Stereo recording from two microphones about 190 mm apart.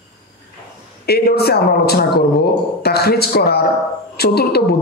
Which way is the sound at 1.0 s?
55° left (ahead or behind).